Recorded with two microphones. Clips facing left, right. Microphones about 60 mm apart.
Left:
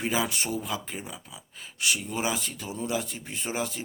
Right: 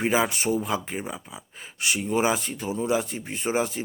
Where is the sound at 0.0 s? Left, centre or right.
Right.